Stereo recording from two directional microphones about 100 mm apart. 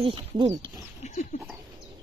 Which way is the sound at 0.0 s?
60° right (ahead or behind).